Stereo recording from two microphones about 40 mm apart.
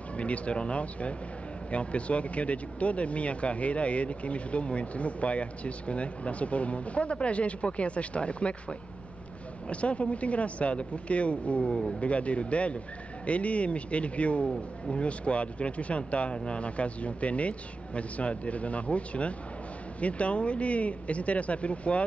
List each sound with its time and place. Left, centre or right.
0.2 s speech: left